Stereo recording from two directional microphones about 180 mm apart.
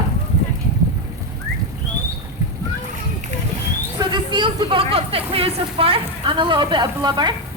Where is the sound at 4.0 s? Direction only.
25° right (ahead or behind).